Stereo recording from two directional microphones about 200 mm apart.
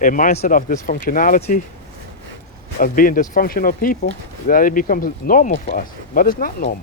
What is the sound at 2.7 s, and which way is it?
Speech, 45° left (ahead or behind).